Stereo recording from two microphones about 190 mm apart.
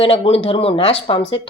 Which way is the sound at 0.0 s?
30° left (ahead or behind).